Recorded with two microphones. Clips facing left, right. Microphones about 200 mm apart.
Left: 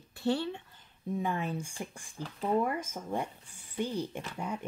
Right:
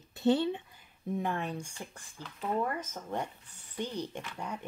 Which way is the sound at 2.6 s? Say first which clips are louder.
Left 2 dB; 10° left (ahead or behind).